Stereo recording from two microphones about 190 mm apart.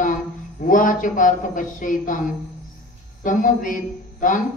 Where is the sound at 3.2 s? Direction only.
45° left (ahead or behind).